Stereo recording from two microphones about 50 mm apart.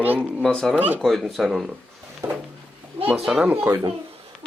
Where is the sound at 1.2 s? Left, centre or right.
Centre.